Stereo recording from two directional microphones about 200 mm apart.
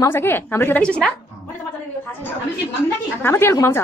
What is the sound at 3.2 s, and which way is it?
Speech, 10° left (ahead or behind).